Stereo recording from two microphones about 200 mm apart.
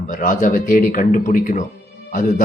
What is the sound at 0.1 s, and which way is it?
A man's voice, 40° left (ahead or behind).